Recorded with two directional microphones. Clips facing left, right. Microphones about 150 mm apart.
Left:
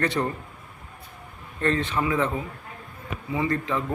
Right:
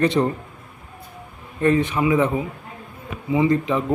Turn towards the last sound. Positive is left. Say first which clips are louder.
# right 7 dB
turn(degrees=-20)  # may be behind; listen again after turning